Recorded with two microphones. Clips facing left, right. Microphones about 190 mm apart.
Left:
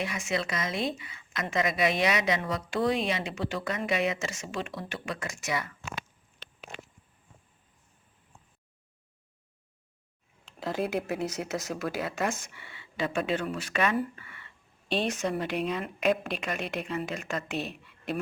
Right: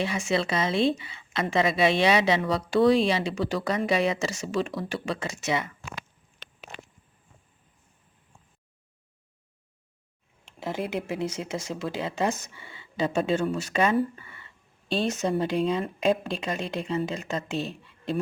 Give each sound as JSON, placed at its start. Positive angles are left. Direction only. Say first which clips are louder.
{"t": 0.0, "sound": "a woman's voice", "louder": "right 5 dB", "side_deg": -30}
{"t": 10.6, "sound": "speech", "louder": "even", "side_deg": -25}